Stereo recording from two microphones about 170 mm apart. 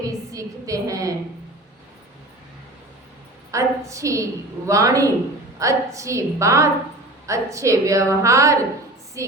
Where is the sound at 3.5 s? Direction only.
20° right (ahead or behind).